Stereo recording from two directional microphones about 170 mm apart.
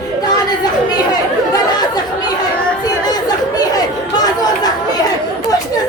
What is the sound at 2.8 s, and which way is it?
Chatter, 25° left (ahead or behind).